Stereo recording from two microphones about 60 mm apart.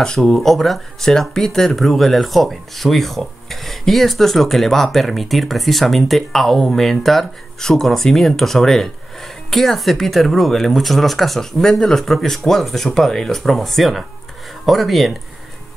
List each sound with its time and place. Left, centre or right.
0.2 s speech: centre